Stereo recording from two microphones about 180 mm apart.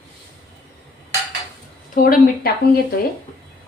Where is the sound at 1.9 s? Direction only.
50° left (ahead or behind).